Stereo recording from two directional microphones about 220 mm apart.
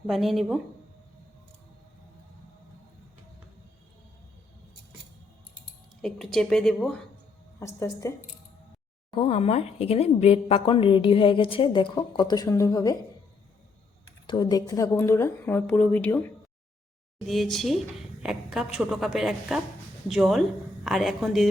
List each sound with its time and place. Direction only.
0.1 s a woman's voice: centre (ahead or behind)
6.0 s a woman's voice: centre (ahead or behind)
7.6 s a woman's voice: 15° left (ahead or behind)
9.1 s a woman's voice: 25° left (ahead or behind)
14.3 s a woman's voice: 20° left (ahead or behind); by 21.4 s centre (ahead or behind)